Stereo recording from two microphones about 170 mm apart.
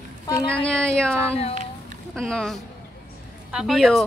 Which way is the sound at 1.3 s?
35° left (ahead or behind).